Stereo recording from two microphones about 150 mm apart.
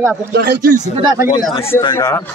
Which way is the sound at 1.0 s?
25° right (ahead or behind).